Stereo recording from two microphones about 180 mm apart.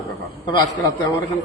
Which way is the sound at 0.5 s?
20° left (ahead or behind).